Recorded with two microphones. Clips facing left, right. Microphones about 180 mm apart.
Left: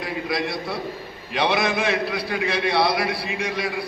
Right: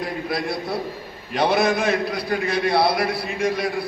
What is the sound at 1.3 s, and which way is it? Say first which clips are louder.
A man's voice: right 3 dB; 45° right (ahead or behind).